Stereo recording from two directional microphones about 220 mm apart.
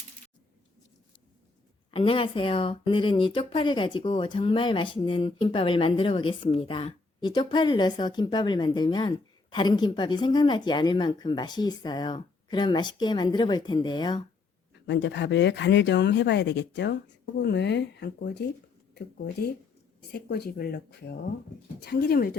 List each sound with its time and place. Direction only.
1.9 s speech: 25° left (ahead or behind)
14.8 s speech: 55° left (ahead or behind)